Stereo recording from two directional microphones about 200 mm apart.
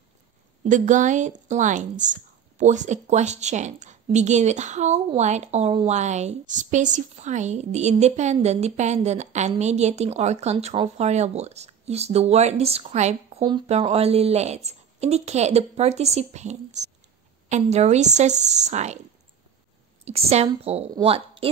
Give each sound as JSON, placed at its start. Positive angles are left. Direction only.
{"t": 0.7, "sound": "a woman's voice", "side_deg": -40}
{"t": 13.4, "sound": "a woman's voice", "side_deg": -20}
{"t": 20.1, "sound": "a woman's voice", "side_deg": -30}